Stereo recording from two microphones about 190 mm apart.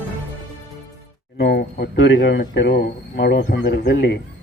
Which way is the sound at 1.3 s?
60° left (ahead or behind).